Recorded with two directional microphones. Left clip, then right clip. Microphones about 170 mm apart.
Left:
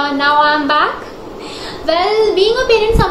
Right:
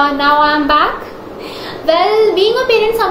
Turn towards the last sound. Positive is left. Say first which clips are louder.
# even
turn(degrees=0)  # may be behind; listen again after turning